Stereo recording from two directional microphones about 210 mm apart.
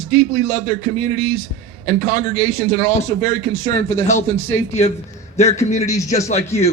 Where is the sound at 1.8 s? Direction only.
15° left (ahead or behind).